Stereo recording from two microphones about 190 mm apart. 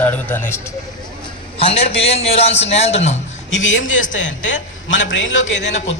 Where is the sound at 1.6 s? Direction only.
30° left (ahead or behind).